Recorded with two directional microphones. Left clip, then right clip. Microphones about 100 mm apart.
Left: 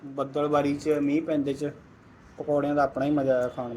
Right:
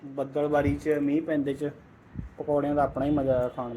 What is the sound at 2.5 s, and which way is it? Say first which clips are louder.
Speech: left 1 dB; 20° right (ahead or behind).